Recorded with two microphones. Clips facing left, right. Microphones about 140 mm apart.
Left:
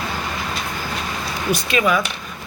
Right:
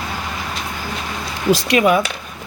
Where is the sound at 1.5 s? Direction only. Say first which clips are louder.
Right 5 dB; 65° right (ahead or behind).